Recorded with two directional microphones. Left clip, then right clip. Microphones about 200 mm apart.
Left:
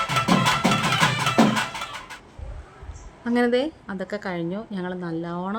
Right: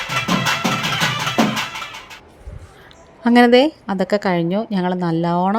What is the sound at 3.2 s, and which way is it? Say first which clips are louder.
A woman's voice: right 10 dB; 30° right (ahead or behind).